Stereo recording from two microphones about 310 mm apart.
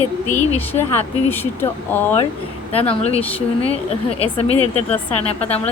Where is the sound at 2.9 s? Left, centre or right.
Centre.